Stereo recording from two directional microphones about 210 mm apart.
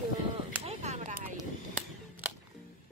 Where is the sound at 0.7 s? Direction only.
35° right (ahead or behind).